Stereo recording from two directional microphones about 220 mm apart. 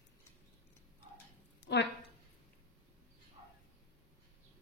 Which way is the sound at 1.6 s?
50° left (ahead or behind).